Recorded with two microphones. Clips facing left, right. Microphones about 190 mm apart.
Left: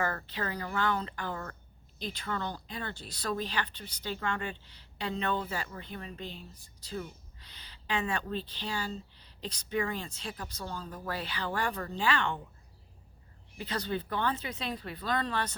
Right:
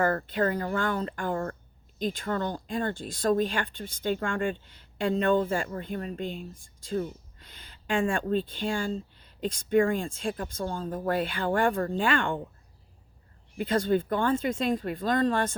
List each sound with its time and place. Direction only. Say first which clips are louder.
0.0 s speech: right 8 dB; 50° right (ahead or behind)
13.6 s speech: right 9 dB; 50° right (ahead or behind)